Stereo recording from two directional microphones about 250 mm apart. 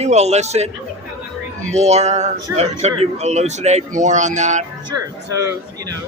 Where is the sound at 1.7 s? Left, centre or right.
Right.